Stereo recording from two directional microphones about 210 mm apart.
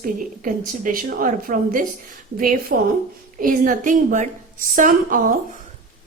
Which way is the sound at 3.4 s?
40° right (ahead or behind).